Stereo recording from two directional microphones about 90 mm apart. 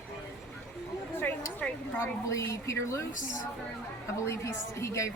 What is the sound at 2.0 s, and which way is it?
A woman's voice, 35° left (ahead or behind).